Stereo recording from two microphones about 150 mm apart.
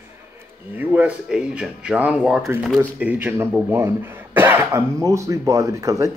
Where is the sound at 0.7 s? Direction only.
10° right (ahead or behind).